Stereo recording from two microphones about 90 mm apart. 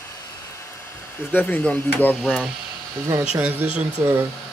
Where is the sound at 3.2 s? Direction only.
10° right (ahead or behind).